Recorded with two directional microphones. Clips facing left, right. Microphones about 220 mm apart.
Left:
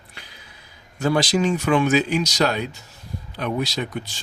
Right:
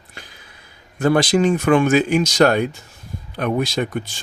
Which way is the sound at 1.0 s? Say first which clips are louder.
Right 4 dB; 55° right (ahead or behind).